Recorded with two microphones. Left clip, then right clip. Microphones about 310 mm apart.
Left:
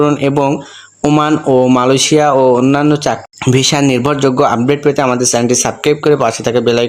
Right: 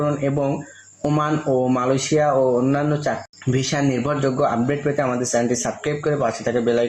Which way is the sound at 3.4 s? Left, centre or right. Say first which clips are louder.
Left 11 dB; left.